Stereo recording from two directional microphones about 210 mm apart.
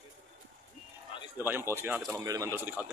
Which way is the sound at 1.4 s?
10° right (ahead or behind).